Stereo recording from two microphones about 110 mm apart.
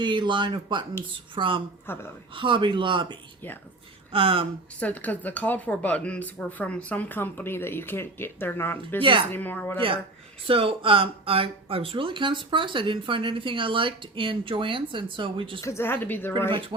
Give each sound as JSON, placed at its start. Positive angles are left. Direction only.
{"t": 0.0, "sound": "speech", "side_deg": -45}
{"t": 1.9, "sound": "speech", "side_deg": 20}
{"t": 2.3, "sound": "speech", "side_deg": -50}
{"t": 4.8, "sound": "speech", "side_deg": 15}
{"t": 9.0, "sound": "speech", "side_deg": -50}
{"t": 9.3, "sound": "speech", "side_deg": 15}
{"t": 10.4, "sound": "speech", "side_deg": -55}
{"t": 15.6, "sound": "speech", "side_deg": 25}
{"t": 16.5, "sound": "speech", "side_deg": -50}